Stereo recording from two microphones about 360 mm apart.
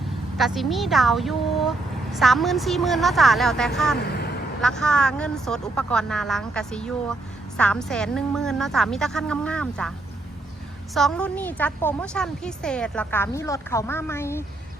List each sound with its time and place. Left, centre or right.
0.3 s speech: centre
3.9 s vehicle: left
4.6 s speech: centre
10.9 s speech: centre